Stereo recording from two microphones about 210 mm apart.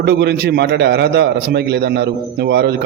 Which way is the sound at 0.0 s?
50° right (ahead or behind).